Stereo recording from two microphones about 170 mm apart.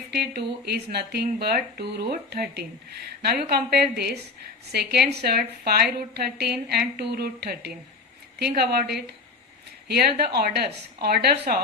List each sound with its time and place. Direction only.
0.1 s speech: 70° right (ahead or behind)